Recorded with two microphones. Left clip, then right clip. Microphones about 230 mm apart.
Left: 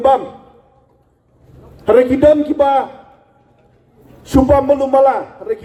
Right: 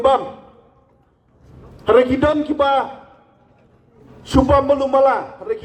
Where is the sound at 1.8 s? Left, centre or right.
Left.